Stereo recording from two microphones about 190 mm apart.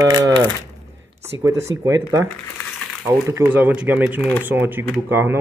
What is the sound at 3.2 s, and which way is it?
Speech, 10° right (ahead or behind).